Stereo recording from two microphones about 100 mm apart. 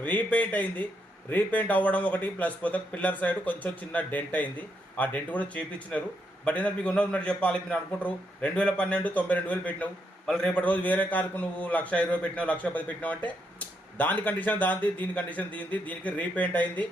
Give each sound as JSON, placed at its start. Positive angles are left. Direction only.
{"t": 0.0, "sound": "a man's voice", "side_deg": 15}